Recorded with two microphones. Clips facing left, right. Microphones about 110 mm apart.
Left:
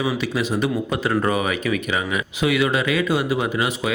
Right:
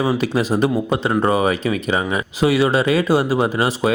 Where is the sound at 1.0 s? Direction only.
25° right (ahead or behind).